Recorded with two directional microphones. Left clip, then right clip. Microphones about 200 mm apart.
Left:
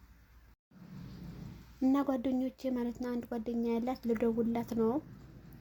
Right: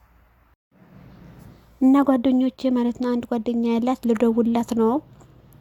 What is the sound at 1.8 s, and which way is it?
Speech, 40° right (ahead or behind).